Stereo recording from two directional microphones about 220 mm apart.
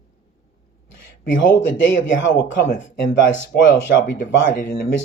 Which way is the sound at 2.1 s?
55° left (ahead or behind).